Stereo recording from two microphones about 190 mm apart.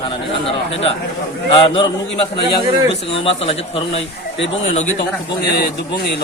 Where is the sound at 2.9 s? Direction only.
30° left (ahead or behind).